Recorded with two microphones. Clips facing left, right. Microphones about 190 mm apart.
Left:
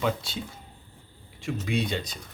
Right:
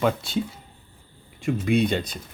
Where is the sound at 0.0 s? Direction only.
55° right (ahead or behind).